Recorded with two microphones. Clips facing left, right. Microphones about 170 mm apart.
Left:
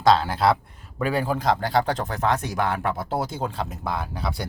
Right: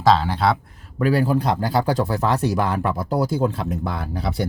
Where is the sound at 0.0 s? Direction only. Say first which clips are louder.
Right 1 dB; centre (ahead or behind).